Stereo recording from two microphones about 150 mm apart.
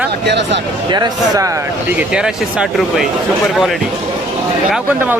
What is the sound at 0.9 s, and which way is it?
Speech, 25° right (ahead or behind).